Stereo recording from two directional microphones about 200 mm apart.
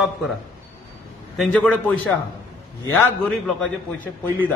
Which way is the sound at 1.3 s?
5° left (ahead or behind).